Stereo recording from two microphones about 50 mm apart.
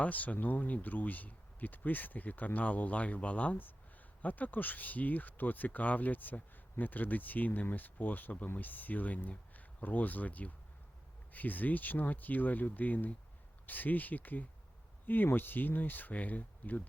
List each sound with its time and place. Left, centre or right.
0.0 s speech: left